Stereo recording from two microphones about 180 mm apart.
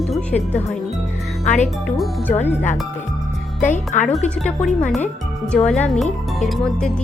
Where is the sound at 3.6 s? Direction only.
45° left (ahead or behind).